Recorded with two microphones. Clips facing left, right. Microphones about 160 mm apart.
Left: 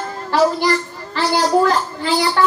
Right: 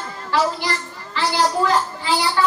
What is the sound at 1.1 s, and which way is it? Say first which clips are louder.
A woman's voice: left 4 dB; 50° left (ahead or behind).